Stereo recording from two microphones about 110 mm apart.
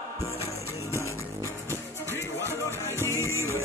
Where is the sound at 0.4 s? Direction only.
25° right (ahead or behind).